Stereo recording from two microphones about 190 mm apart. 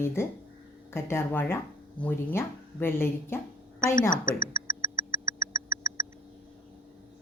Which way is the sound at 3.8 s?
45° left (ahead or behind).